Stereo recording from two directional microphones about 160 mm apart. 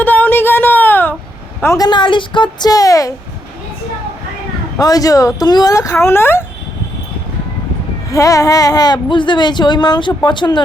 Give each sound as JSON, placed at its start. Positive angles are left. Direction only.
{"t": 0.0, "sound": "a sound", "side_deg": 10}
{"t": 1.6, "sound": "speech", "side_deg": 20}
{"t": 4.8, "sound": "speech", "side_deg": 25}
{"t": 8.1, "sound": "speech", "side_deg": 20}